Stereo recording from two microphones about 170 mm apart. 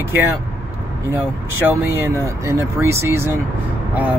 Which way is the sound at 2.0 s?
20° right (ahead or behind).